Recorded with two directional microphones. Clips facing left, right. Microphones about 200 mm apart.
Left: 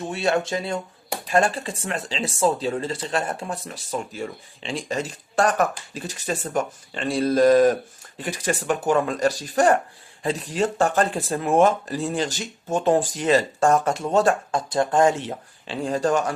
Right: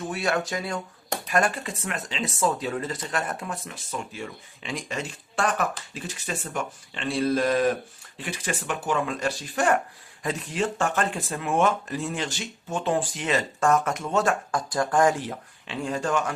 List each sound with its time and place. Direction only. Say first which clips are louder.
0.1 s speech: left 5 dB; 25° left (ahead or behind)